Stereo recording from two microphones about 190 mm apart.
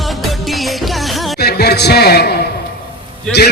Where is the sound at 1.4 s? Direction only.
60° left (ahead or behind).